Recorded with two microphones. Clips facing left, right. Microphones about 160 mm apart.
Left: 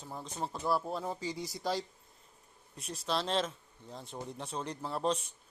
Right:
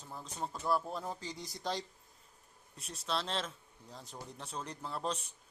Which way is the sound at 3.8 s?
30° left (ahead or behind).